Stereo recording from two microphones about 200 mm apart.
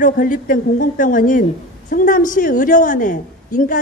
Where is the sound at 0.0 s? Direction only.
40° left (ahead or behind).